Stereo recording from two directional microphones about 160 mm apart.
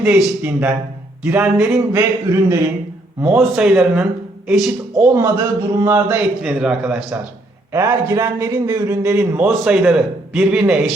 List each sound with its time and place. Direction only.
0.0 s a man's voice: 10° right (ahead or behind)
7.7 s a man's voice: 15° right (ahead or behind)